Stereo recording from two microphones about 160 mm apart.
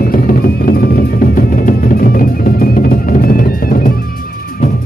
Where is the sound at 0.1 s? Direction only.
65° left (ahead or behind).